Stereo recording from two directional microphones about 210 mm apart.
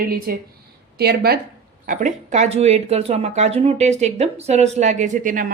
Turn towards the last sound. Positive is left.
turn(degrees=-40)  # may be behind; listen again after turning